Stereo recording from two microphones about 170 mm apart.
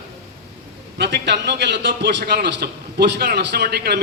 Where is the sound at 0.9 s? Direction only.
85° right.